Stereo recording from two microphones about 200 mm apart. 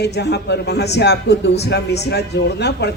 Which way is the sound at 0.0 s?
55° left (ahead or behind).